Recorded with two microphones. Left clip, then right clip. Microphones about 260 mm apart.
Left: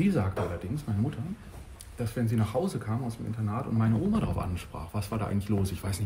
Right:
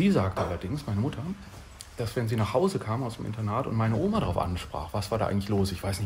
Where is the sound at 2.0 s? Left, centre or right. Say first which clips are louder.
Right 2 dB; centre.